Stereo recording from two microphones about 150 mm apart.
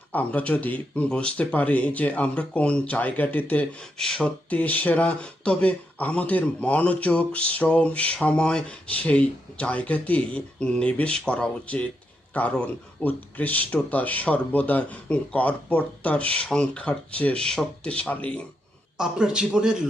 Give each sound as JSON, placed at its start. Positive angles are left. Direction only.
{"t": 0.1, "sound": "speech", "side_deg": 10}
{"t": 18.9, "sound": "a man's voice", "side_deg": -5}